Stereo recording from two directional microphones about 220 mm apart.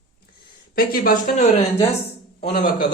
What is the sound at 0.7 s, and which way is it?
A man's voice, 40° left (ahead or behind).